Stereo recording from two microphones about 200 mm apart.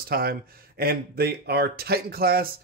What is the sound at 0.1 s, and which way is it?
Speech, 50° right (ahead or behind).